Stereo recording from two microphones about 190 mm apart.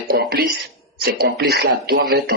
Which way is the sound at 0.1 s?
55° right (ahead or behind).